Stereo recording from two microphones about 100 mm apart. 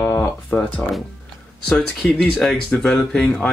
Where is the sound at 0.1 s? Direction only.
25° left (ahead or behind).